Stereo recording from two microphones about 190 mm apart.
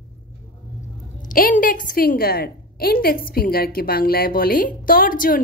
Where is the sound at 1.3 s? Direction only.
45° left (ahead or behind).